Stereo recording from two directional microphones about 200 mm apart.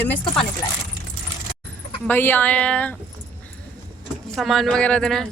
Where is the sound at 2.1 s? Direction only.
10° left (ahead or behind).